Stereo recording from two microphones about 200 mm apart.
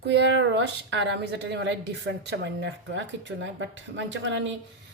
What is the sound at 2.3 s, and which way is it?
Speech, 60° right (ahead or behind).